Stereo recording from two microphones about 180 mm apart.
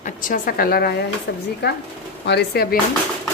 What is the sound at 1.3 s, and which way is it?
A woman's voice, 70° left (ahead or behind).